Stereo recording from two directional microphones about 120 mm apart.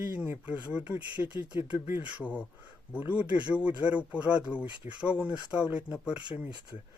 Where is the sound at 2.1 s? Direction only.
10° right (ahead or behind).